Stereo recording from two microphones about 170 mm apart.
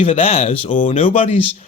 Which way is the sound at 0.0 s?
35° left (ahead or behind).